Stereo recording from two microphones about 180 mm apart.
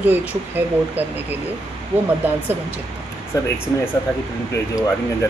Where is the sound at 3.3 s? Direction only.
20° left (ahead or behind).